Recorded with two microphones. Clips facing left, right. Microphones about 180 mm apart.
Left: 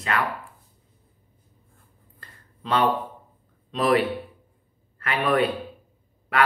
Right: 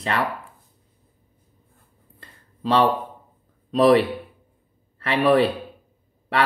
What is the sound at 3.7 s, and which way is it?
A man's voice, 35° right (ahead or behind).